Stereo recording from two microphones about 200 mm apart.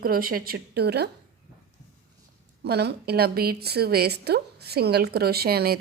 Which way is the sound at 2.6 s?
55° right (ahead or behind).